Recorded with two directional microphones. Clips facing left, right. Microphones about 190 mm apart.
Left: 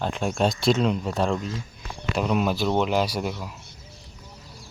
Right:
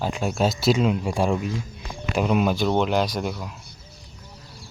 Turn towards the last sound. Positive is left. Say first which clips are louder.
# right 1 dB
turn(degrees=5)  # may be behind; listen again after turning